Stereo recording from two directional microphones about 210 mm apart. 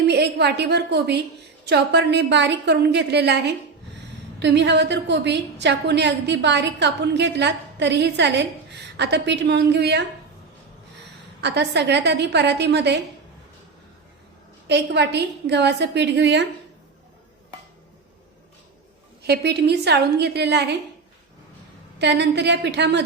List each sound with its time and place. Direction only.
0.1 s a woman's voice: 50° right (ahead or behind)
11.3 s a woman's voice: 55° right (ahead or behind)
14.7 s a woman's voice: 55° right (ahead or behind)
19.3 s a woman's voice: 50° right (ahead or behind)
21.9 s a woman's voice: 55° right (ahead or behind)